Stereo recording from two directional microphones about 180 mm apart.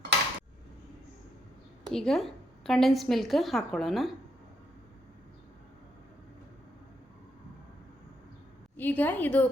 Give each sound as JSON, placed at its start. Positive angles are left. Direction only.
{"t": 1.9, "sound": "a woman's voice", "side_deg": 5}
{"t": 8.7, "sound": "a woman's voice", "side_deg": 10}